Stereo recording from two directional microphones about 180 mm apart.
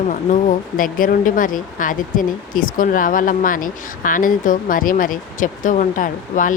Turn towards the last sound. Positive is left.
turn(degrees=45)  # may be behind; listen again after turning